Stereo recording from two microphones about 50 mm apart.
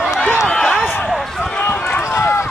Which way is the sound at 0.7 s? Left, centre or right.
Centre.